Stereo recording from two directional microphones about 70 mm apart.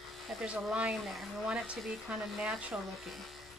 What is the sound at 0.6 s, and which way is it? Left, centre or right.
A woman's voice, centre.